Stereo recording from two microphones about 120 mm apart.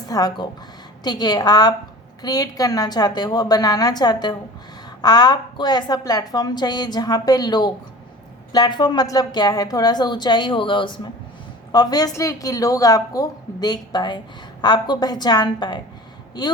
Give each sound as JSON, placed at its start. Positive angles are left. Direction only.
{"t": 0.1, "sound": "a woman's voice", "side_deg": 30}